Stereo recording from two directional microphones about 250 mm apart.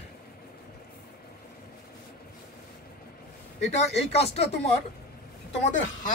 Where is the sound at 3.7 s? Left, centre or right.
Left.